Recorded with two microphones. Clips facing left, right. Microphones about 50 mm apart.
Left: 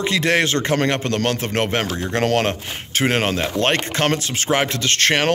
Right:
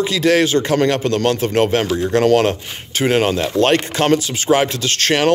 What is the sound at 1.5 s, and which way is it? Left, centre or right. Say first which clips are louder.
A man's voice: right 5 dB; left.